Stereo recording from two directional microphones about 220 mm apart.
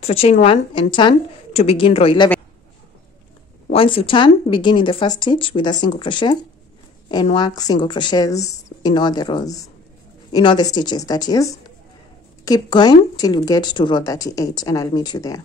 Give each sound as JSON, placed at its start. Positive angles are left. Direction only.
{"t": 0.0, "sound": "speech", "side_deg": 25}
{"t": 3.7, "sound": "speech", "side_deg": 25}